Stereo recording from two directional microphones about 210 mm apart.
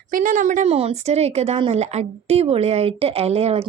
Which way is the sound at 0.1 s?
40° right (ahead or behind).